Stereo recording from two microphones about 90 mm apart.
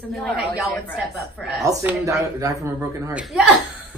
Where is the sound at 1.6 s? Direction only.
40° right (ahead or behind).